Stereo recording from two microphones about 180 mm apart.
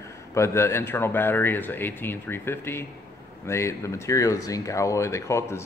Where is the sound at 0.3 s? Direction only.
15° left (ahead or behind).